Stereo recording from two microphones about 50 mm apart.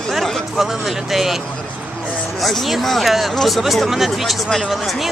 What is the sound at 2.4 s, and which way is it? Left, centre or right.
Speech, centre.